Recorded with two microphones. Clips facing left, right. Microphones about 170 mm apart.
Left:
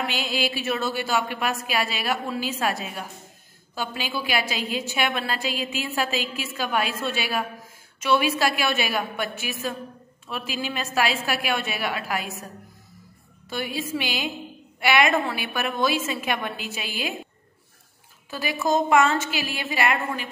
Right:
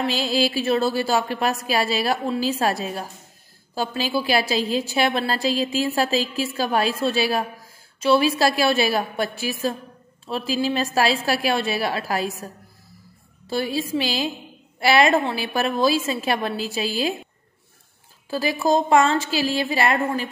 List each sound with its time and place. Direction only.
0.0 s a woman's voice: 35° right (ahead or behind)
13.5 s a woman's voice: 35° right (ahead or behind)
18.3 s a woman's voice: 35° right (ahead or behind)